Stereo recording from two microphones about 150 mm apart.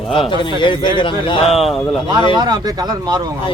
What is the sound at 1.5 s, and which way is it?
Speech, centre (ahead or behind).